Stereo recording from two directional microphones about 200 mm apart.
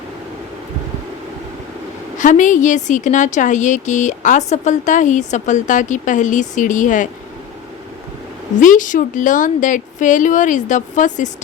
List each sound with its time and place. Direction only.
2.1 s a woman's voice: 40° left (ahead or behind)
8.5 s a woman's voice: 40° left (ahead or behind)